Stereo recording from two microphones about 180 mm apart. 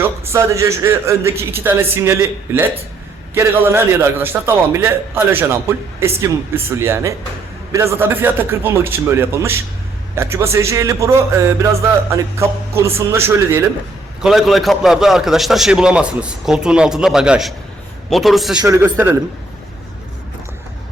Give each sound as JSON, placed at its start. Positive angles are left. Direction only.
{"t": 0.0, "sound": "a man's voice", "side_deg": -15}
{"t": 14.2, "sound": "a man's voice", "side_deg": 0}
{"t": 18.5, "sound": "a man's voice", "side_deg": -20}